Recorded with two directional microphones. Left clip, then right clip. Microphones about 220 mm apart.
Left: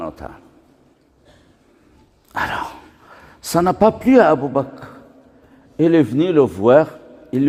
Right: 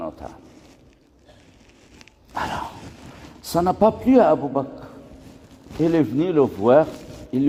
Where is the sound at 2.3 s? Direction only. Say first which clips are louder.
Left 5 dB; 50° left (ahead or behind).